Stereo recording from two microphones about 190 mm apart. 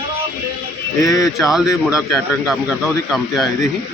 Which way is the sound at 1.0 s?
15° left (ahead or behind).